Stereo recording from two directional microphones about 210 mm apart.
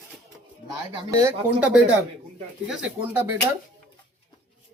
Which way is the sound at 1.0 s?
15° right (ahead or behind).